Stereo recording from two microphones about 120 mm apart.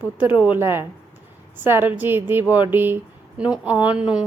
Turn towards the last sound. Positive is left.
turn(degrees=-10)  # may be behind; listen again after turning